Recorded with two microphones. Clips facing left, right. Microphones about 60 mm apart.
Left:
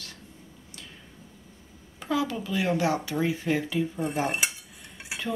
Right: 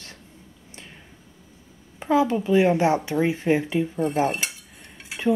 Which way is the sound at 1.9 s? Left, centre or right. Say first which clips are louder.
Right 7 dB; right.